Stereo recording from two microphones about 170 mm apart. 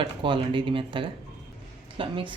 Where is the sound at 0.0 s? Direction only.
30° right (ahead or behind).